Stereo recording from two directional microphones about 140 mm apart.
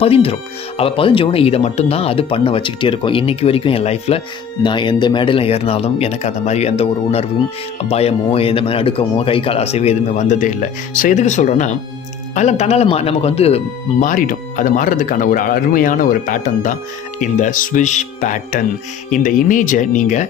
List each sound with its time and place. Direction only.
0.0 s speech: 45° left (ahead or behind)
4.6 s speech: 35° left (ahead or behind)
14.0 s speech: 75° left (ahead or behind)